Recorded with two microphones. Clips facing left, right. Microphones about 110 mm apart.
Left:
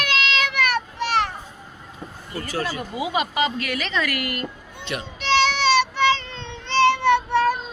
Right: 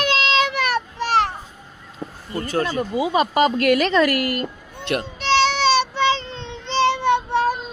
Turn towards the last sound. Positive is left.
turn(degrees=-20)  # may be behind; listen again after turning